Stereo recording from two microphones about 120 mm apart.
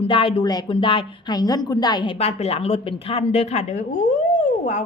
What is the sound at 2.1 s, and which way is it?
A woman's voice, 55° left (ahead or behind).